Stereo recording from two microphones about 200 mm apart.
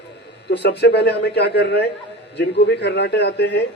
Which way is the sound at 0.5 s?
55° left (ahead or behind).